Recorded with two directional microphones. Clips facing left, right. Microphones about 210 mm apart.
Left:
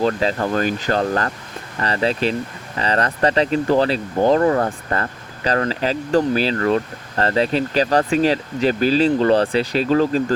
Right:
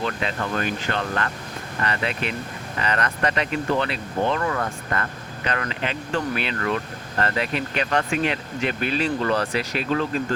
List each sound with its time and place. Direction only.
0.0 s speech: 35° left (ahead or behind)